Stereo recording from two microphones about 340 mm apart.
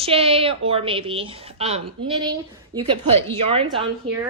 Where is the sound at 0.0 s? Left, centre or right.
Centre.